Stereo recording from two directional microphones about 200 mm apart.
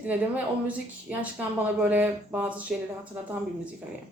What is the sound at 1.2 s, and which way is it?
Speech, 5° right (ahead or behind).